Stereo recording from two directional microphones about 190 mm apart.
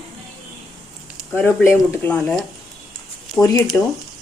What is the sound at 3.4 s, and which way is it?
Speech, 15° left (ahead or behind).